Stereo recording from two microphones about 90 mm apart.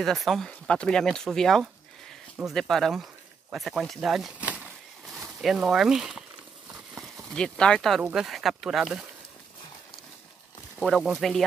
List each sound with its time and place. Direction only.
0.0 s speech: centre (ahead or behind)
4.4 s a sound: 15° right (ahead or behind)
5.0 s speech: centre (ahead or behind)
10.8 s speech: centre (ahead or behind)